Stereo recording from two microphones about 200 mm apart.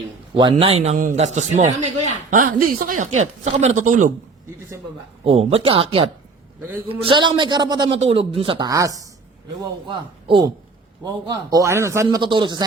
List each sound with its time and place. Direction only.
0.3 s a man's voice: 25° right (ahead or behind)
5.2 s a man's voice: 30° right (ahead or behind); by 12.0 s 15° right (ahead or behind)
12.0 s speech: 25° right (ahead or behind)